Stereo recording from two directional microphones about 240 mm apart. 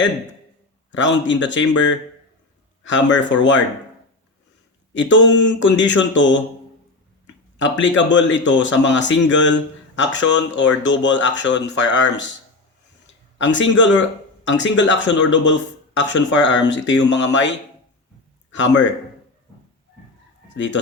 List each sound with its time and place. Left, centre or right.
0.9 s speech: left
4.9 s speech: left
7.6 s speech: left
13.4 s speech: left
18.5 s speech: left